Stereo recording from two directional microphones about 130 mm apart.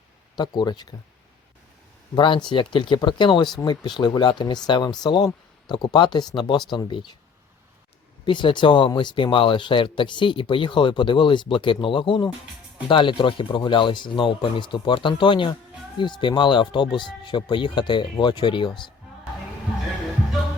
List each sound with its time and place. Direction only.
0.3 s speech: 35° left (ahead or behind)
2.1 s speech: 40° left (ahead or behind)
8.2 s speech: 40° left (ahead or behind)